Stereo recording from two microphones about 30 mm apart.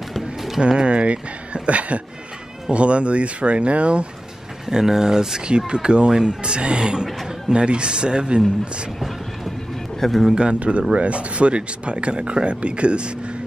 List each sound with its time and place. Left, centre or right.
0.6 s speech: right
4.6 s speech: centre
5.7 s speech: right
9.9 s a man's voice: centre
10.3 s speech: right
11.0 s speech: right